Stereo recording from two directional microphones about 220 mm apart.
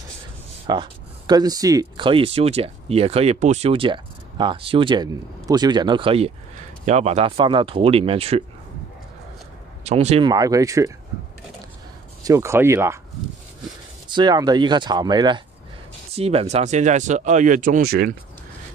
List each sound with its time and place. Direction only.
0.7 s speech: 20° right (ahead or behind)
9.8 s speech: 30° right (ahead or behind)
12.2 s speech: 15° right (ahead or behind)
14.0 s speech: 20° right (ahead or behind); by 18.1 s 45° right (ahead or behind)